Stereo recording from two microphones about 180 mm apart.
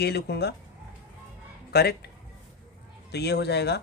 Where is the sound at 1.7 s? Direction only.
60° left (ahead or behind).